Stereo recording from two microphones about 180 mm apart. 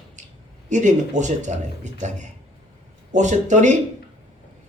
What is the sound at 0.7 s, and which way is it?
A man's voice, 40° right (ahead or behind).